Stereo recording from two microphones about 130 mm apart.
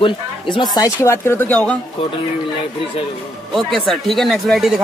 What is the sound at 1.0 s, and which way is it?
Speech, 15° left (ahead or behind).